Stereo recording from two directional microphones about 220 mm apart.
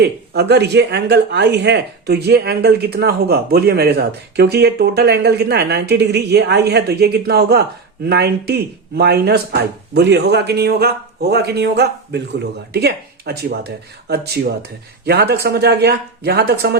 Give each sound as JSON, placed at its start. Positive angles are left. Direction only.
{"t": 0.0, "sound": "speech", "side_deg": -50}